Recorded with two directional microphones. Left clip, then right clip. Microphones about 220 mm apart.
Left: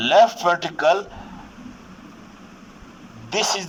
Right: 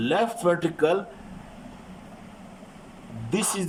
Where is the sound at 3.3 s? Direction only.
35° left (ahead or behind).